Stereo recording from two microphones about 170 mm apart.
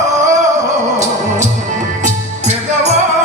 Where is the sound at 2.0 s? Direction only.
40° right (ahead or behind).